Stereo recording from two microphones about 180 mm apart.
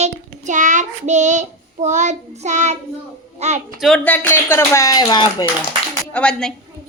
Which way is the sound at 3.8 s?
Centre (ahead or behind).